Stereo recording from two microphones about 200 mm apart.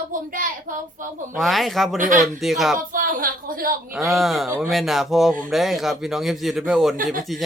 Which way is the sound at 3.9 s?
Centre (ahead or behind).